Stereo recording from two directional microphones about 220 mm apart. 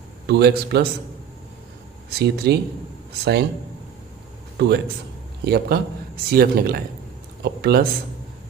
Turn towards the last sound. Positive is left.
turn(degrees=-45)  # may be behind; listen again after turning